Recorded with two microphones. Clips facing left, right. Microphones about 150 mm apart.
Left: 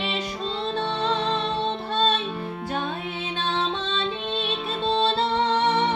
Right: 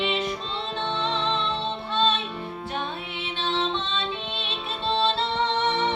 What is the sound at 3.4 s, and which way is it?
Music, 45° left (ahead or behind).